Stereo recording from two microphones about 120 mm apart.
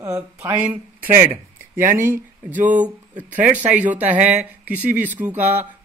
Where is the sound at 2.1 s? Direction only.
15° right (ahead or behind).